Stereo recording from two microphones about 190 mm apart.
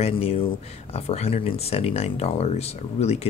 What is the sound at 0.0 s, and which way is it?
Speech, 30° left (ahead or behind).